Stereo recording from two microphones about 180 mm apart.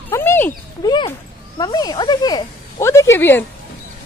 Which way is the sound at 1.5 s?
20° left (ahead or behind).